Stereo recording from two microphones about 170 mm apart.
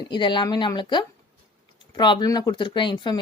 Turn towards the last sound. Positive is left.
turn(degrees=25)  # may be behind; listen again after turning